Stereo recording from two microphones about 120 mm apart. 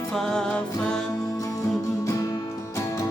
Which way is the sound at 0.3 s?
5° left (ahead or behind).